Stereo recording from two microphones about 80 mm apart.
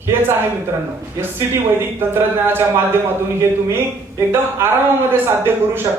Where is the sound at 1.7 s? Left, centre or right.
Right.